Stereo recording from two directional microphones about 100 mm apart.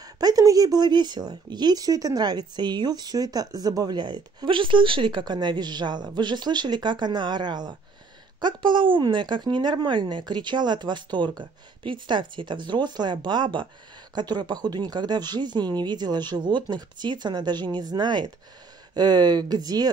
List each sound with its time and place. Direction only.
0.0 s speech: 40° right (ahead or behind)